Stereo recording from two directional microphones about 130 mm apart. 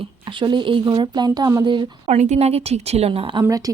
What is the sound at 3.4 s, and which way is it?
Speech, 25° right (ahead or behind).